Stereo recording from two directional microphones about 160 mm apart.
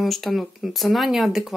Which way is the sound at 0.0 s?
Centre (ahead or behind).